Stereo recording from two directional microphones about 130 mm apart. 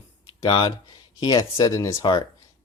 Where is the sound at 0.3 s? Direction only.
30° left (ahead or behind).